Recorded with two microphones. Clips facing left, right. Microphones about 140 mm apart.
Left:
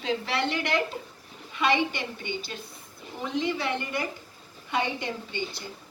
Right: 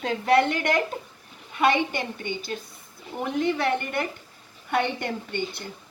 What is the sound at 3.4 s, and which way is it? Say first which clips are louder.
A woman's voice: right 7 dB; 60° right (ahead or behind).